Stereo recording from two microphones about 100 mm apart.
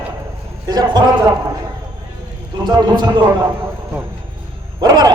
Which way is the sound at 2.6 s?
50° right (ahead or behind).